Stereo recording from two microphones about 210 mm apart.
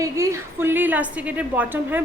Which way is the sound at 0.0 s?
15° right (ahead or behind).